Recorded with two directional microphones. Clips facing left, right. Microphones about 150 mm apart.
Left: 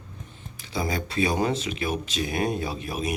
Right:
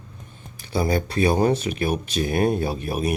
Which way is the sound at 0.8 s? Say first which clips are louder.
Right 5 dB; 45° right (ahead or behind).